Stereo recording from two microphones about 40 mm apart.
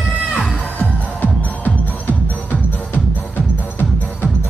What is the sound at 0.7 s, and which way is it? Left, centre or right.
Music, left.